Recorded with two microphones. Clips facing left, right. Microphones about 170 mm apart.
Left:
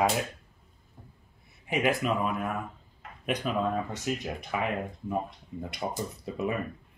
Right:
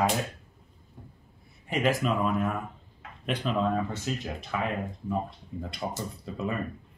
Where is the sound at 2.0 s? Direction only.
5° left (ahead or behind).